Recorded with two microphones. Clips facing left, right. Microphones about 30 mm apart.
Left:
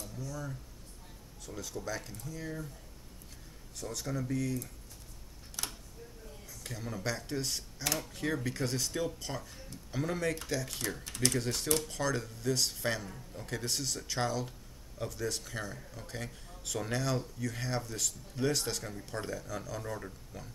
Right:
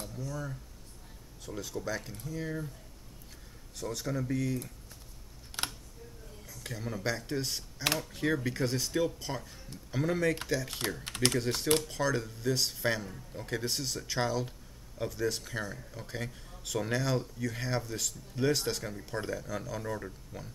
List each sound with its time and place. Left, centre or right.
0.1 s speech: centre
3.7 s speech: centre
5.6 s computer keyboard: right
6.4 s speech: centre
11.1 s speech: right
11.3 s speech: centre